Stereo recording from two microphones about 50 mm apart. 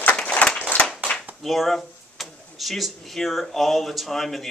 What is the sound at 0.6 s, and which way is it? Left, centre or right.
Clapping, left.